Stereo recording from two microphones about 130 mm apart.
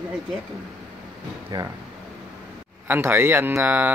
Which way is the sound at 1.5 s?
30° right (ahead or behind).